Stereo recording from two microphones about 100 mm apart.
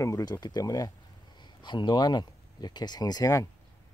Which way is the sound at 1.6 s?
50° left (ahead or behind).